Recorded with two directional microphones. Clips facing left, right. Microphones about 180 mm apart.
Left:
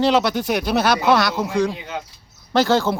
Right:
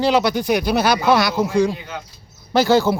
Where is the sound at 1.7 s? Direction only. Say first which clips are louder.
Even; 20° left (ahead or behind).